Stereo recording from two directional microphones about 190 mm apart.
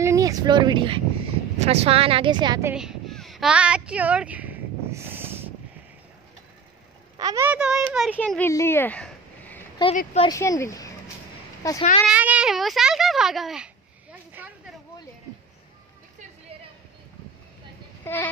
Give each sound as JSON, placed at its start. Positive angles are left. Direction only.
{"t": 0.0, "sound": "a sound", "side_deg": -15}
{"t": 1.6, "sound": "a woman's voice", "side_deg": -35}
{"t": 2.7, "sound": "a sound", "side_deg": -5}
{"t": 7.2, "sound": "speech", "side_deg": -15}
{"t": 8.2, "sound": "speech", "side_deg": 10}
{"t": 9.8, "sound": "speech", "side_deg": 25}
{"t": 12.1, "sound": "a child's voice", "side_deg": -5}
{"t": 14.1, "sound": "a sound", "side_deg": -10}
{"t": 18.0, "sound": "speech", "side_deg": 10}